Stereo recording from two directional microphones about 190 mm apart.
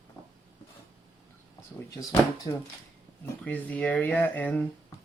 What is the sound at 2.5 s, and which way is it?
Speech, 25° left (ahead or behind).